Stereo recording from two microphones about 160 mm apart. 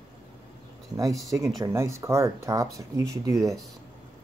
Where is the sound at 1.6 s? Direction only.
20° right (ahead or behind).